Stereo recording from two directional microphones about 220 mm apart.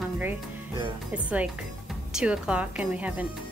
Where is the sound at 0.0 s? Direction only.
10° right (ahead or behind).